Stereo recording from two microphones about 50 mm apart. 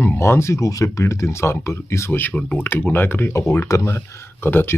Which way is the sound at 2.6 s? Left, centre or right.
Left.